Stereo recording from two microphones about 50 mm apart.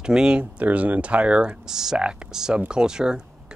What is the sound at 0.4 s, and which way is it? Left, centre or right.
Speech, right.